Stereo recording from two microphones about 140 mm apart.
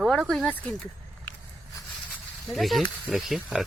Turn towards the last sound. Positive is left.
turn(degrees=0)  # may be behind; listen again after turning